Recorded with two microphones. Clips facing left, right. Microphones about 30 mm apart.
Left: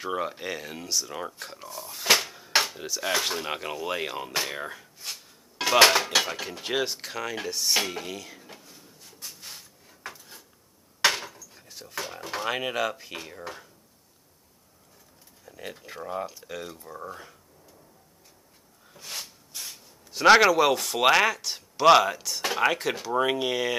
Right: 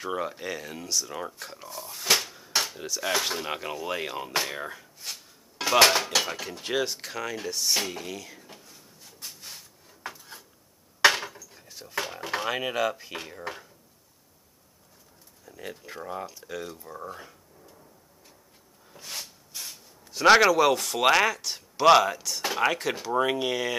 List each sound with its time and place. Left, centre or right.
0.0 s speech: centre
2.0 s a sound: centre
2.7 s speech: centre
7.4 s drawer open or close: centre
10.0 s a sound: centre
11.5 s dog: centre
12.2 s dishes: centre
12.4 s speech: centre
15.4 s a sound: centre
15.8 s speech: centre
18.9 s speech: centre